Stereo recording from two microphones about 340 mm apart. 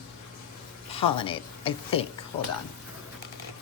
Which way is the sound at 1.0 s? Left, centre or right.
Centre.